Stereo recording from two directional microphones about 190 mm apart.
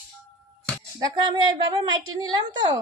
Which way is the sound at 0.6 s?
5° left (ahead or behind).